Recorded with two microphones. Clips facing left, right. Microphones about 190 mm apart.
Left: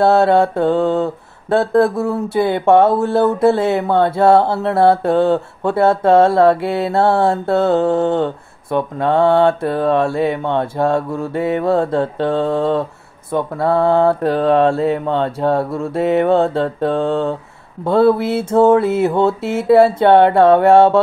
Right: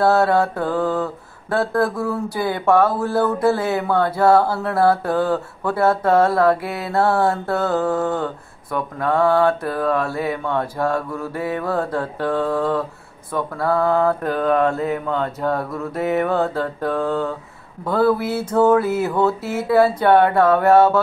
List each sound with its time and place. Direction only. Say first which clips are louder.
0.0 s mantra: left 4 dB; 25° left (ahead or behind)